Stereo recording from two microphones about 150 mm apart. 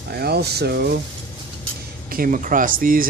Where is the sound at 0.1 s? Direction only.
90° right.